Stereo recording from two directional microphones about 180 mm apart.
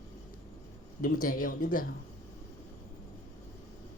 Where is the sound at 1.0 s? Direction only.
50° left (ahead or behind).